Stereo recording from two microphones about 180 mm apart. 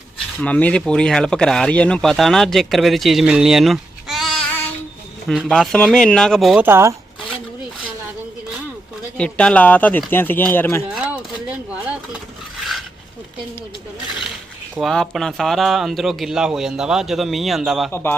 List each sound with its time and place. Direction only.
0.3 s speech: 10° left (ahead or behind)
6.7 s speech: 15° right (ahead or behind)
9.1 s speech: 5° left (ahead or behind)
11.0 s a sound: 5° right (ahead or behind)
14.8 s speech: centre (ahead or behind)
17.9 s speech: 10° left (ahead or behind)